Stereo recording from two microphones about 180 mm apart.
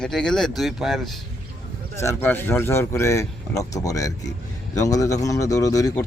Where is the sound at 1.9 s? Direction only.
15° left (ahead or behind).